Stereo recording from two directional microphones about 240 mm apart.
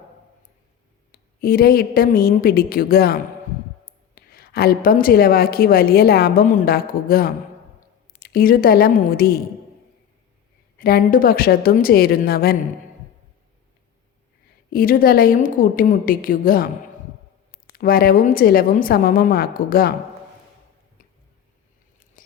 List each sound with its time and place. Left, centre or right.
1.4 s a woman's voice: left
10.8 s a woman's voice: left
14.7 s a woman's voice: left
17.7 s a woman's voice: left